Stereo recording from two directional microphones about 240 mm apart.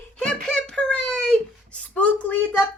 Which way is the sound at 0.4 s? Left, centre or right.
Centre.